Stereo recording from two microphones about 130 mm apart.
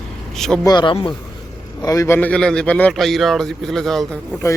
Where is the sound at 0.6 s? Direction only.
35° left (ahead or behind).